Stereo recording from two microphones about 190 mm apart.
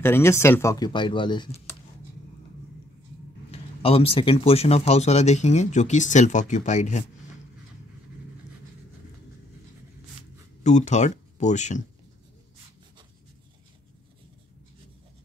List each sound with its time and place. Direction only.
0.0 s speech: 15° left (ahead or behind)
3.5 s speech: 30° left (ahead or behind)
10.6 s speech: 35° left (ahead or behind)